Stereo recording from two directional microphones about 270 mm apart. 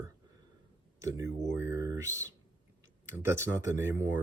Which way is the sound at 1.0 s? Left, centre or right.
Centre.